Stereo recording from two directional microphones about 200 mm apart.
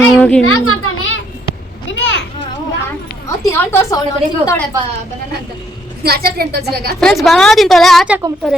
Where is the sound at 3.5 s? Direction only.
10° left (ahead or behind).